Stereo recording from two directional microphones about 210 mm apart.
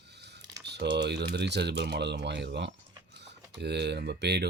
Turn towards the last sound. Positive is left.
turn(degrees=-50)  # may be behind; listen again after turning